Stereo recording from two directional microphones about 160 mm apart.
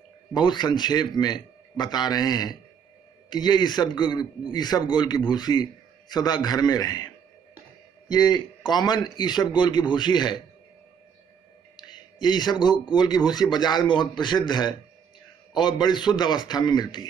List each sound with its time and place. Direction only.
0.3 s a man's voice: 25° left (ahead or behind)
8.1 s a man's voice: 25° left (ahead or behind)
11.7 s a man's voice: 25° left (ahead or behind)